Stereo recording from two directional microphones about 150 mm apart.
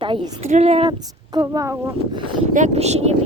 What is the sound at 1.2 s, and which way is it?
Speech, 25° right (ahead or behind).